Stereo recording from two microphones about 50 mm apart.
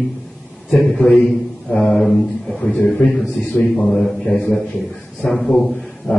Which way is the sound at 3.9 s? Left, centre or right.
Centre.